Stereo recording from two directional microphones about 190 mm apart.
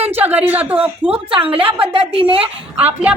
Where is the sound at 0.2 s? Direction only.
10° right (ahead or behind).